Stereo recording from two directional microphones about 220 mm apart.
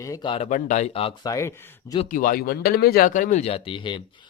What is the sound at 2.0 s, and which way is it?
Speech, 35° left (ahead or behind).